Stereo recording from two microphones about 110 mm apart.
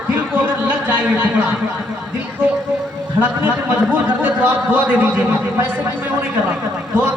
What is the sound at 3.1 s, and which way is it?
A man's voice, 15° right (ahead or behind).